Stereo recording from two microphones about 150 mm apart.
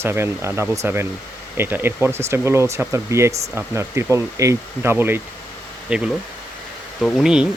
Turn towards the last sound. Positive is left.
turn(degrees=-5)  # may be behind; listen again after turning